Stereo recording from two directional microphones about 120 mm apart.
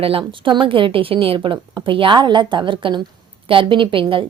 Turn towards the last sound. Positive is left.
turn(degrees=-45)  # may be behind; listen again after turning